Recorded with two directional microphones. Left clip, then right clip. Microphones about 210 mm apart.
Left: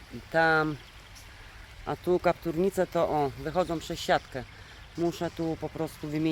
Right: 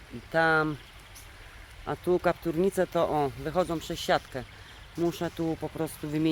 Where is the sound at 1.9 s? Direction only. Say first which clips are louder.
Even; 5° right (ahead or behind).